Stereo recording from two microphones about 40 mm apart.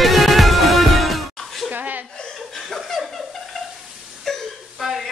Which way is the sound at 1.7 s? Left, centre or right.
Right.